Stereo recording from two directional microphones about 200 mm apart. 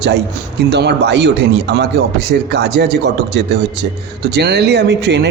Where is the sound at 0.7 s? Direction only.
60° right (ahead or behind).